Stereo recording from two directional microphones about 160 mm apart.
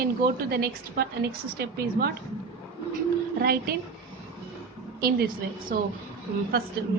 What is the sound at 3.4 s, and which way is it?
Speech, 75° right (ahead or behind).